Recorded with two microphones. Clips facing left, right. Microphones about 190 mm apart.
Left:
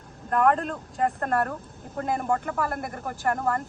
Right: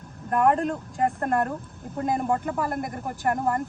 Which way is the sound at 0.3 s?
5° right (ahead or behind).